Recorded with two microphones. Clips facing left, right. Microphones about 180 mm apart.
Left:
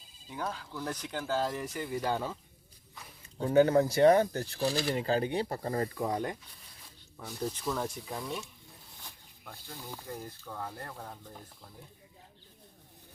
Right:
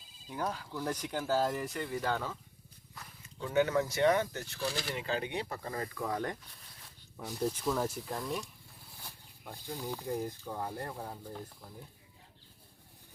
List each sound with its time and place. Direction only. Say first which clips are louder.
0.3 s speech: right 1 dB; 10° right (ahead or behind); by 2.4 s 15° left (ahead or behind)
3.3 s speech: left 6 dB; 40° left (ahead or behind)
4.7 s speech: left 7 dB; centre (ahead or behind)
4.9 s speech: left 6 dB; 40° left (ahead or behind)
6.0 s speech: left 3 dB; 20° left (ahead or behind)
7.2 s speech: right 2 dB; 5° right (ahead or behind)
9.0 s a sound: right 1 dB; 10° right (ahead or behind)
9.8 s speech: right 6 dB; 15° right (ahead or behind)